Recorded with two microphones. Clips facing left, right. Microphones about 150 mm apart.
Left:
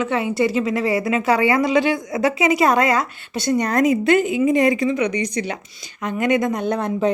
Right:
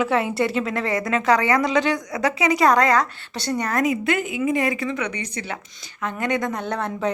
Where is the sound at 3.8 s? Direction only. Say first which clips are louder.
Left 6 dB; 30° left (ahead or behind).